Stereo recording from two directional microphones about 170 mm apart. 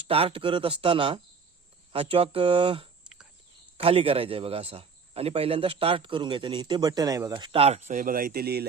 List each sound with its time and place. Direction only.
0.1 s speech: 35° right (ahead or behind); by 8.6 s 65° right (ahead or behind)